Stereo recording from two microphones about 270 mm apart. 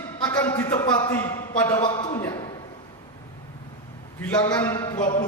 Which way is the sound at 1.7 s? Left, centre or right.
Centre.